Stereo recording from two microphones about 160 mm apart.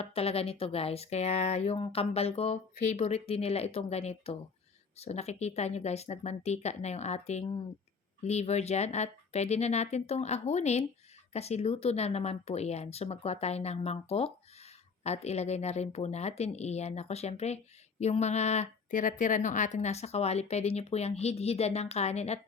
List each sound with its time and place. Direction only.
0.0 s a woman's voice: 40° left (ahead or behind)